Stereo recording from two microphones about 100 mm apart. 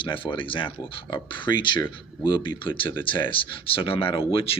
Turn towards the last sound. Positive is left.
turn(degrees=65)  # may be behind; listen again after turning